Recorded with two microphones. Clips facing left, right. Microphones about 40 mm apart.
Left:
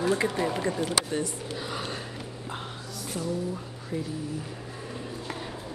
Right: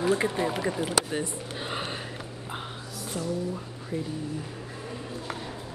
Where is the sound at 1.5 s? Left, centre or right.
Right.